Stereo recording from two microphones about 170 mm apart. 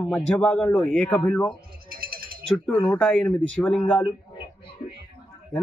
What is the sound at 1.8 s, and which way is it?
Music, 60° right (ahead or behind).